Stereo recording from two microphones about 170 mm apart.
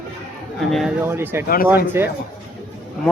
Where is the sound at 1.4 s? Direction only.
60° left (ahead or behind).